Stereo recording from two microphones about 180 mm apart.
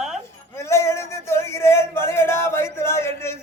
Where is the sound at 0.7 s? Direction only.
15° left (ahead or behind).